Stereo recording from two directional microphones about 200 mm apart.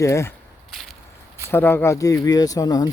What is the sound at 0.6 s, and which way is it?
Whip, centre (ahead or behind).